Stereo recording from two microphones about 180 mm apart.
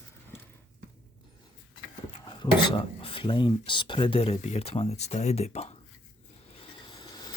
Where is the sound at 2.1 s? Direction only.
25° left (ahead or behind).